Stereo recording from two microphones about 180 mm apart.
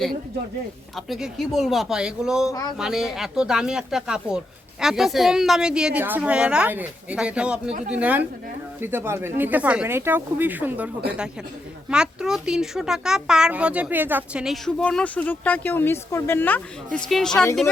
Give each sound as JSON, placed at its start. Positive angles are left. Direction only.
{"t": 0.9, "sound": "speech", "side_deg": 0}
{"t": 2.5, "sound": "speech", "side_deg": 20}
{"t": 2.7, "sound": "speech", "side_deg": -5}